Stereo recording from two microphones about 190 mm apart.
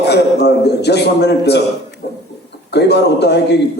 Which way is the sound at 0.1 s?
60° left (ahead or behind).